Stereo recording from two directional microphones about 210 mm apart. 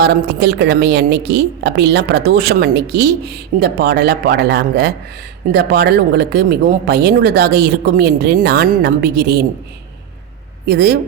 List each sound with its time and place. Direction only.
0.0 s a woman's voice: 50° right (ahead or behind)
10.7 s a woman's voice: 50° right (ahead or behind)